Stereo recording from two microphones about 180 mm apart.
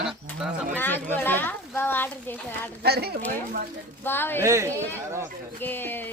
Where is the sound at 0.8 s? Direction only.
10° left (ahead or behind).